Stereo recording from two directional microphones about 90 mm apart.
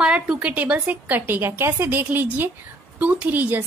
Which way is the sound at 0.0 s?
10° right (ahead or behind).